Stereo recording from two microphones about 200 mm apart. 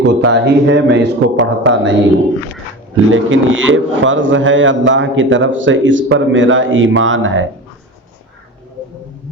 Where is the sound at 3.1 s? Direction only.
75° right (ahead or behind).